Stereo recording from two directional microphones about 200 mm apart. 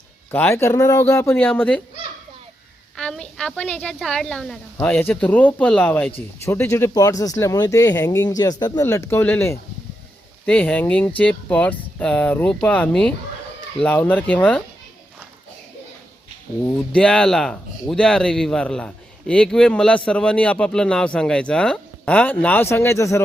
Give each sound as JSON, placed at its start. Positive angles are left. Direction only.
{"t": 0.3, "sound": "speech", "side_deg": 10}
{"t": 2.9, "sound": "speech", "side_deg": 5}
{"t": 16.6, "sound": "speech", "side_deg": 5}